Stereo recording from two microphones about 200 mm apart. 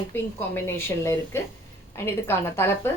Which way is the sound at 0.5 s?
10° left (ahead or behind).